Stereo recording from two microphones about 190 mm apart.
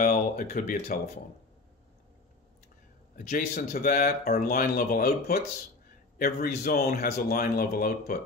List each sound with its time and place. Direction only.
0.0 s speech: 45° left (ahead or behind)
3.3 s speech: 45° left (ahead or behind)